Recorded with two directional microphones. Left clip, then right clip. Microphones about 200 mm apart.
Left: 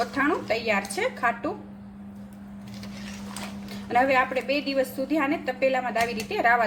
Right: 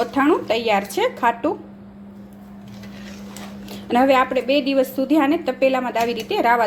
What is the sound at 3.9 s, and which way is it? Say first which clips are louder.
A woman's voice: right 6 dB; 35° right (ahead or behind).